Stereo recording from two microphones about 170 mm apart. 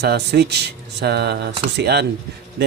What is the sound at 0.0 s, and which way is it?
A man's voice, 75° right (ahead or behind).